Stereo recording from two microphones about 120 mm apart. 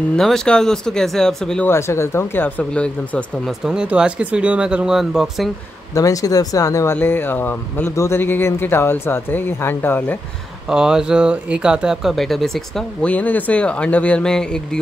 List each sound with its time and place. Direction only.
0.1 s speech: 5° left (ahead or behind)
1.7 s speech: 20° left (ahead or behind)
3.6 s speech: 10° right (ahead or behind)
5.9 s speech: 30° left (ahead or behind)
10.7 s speech: 5° right (ahead or behind)
13.1 s speech: 15° left (ahead or behind)